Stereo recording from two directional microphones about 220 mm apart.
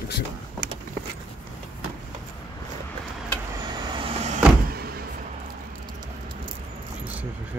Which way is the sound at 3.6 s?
20° right (ahead or behind).